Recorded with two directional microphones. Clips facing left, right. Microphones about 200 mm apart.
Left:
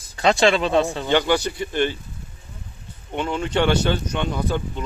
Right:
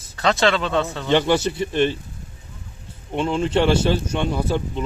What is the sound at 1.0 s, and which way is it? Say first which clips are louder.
Speech: right 1 dB; 5° left (ahead or behind).